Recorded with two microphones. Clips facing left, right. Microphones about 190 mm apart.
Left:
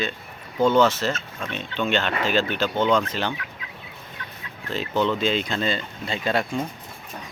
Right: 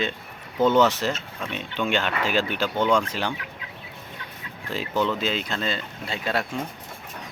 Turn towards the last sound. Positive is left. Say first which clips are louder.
# left 3 dB
turn(degrees=-5)  # may be behind; listen again after turning